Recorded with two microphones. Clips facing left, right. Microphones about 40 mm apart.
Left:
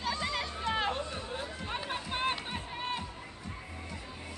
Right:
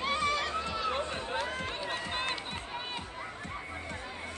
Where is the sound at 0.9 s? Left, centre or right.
Right.